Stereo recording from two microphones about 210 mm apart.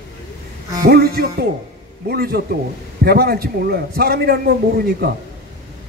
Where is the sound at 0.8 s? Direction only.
45° right (ahead or behind).